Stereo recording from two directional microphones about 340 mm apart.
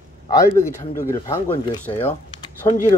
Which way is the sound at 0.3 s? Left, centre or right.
Centre.